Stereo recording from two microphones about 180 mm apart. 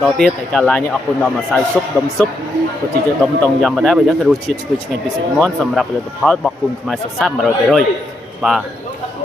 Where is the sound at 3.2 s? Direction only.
Centre (ahead or behind).